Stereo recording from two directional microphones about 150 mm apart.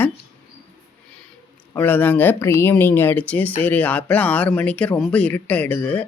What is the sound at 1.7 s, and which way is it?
Speech, 10° left (ahead or behind).